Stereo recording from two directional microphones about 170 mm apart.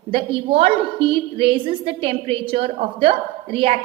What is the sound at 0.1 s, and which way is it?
A woman's voice, 35° right (ahead or behind).